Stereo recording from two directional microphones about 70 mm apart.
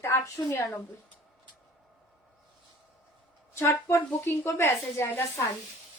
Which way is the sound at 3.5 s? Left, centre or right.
Left.